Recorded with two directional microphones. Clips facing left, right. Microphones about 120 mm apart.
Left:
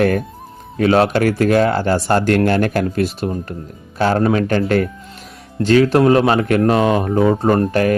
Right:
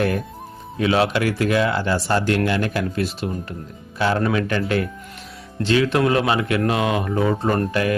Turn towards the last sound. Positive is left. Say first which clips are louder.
# left 5 dB
turn(degrees=45)  # may be behind; listen again after turning